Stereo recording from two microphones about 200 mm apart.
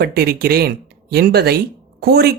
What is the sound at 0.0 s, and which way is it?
Speech, 50° right (ahead or behind).